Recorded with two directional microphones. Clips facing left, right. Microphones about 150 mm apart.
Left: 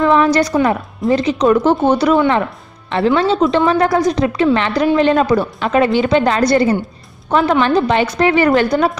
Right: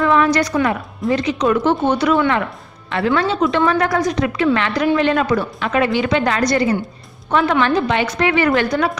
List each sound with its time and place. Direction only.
0.0 s a woman's voice: 30° left (ahead or behind)